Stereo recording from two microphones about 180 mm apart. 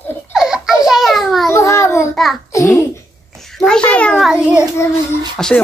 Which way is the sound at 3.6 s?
5° left (ahead or behind).